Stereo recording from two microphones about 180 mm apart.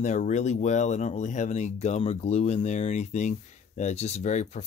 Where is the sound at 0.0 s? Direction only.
40° left (ahead or behind).